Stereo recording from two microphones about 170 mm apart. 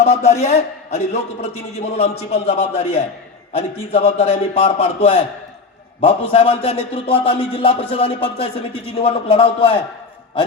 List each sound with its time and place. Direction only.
0.0 s a man's voice: 40° left (ahead or behind)